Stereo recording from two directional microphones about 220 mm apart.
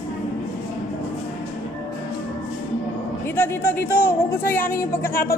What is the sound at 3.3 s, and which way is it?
A woman's voice, 10° left (ahead or behind).